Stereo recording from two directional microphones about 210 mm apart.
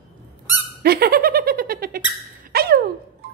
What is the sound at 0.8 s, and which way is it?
Squeak, 45° right (ahead or behind).